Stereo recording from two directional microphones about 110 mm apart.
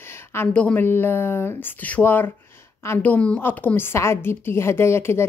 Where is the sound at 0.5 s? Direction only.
10° left (ahead or behind).